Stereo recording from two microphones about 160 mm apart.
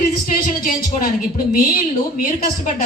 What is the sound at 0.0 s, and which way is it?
Speech, 60° left (ahead or behind).